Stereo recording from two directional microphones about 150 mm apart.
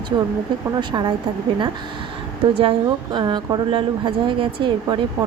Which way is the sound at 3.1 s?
30° right (ahead or behind).